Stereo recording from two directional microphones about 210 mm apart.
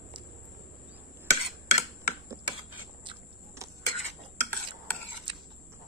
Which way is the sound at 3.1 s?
15° right (ahead or behind).